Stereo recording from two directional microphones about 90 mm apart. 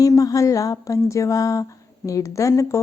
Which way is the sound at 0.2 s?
40° left (ahead or behind).